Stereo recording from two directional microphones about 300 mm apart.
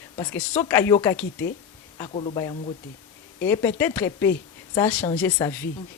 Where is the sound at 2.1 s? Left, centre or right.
Centre.